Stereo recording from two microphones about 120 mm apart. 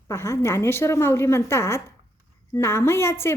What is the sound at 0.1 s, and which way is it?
A woman's voice, 25° left (ahead or behind).